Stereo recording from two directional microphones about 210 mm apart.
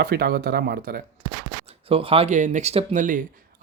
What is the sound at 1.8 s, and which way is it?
Speech, 25° right (ahead or behind).